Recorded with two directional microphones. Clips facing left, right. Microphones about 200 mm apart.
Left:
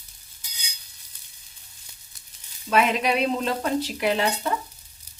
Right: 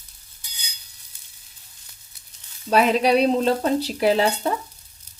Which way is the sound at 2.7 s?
35° right (ahead or behind).